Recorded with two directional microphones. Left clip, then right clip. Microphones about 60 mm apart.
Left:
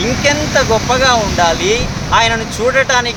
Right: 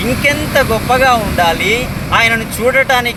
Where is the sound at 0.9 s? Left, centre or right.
Left.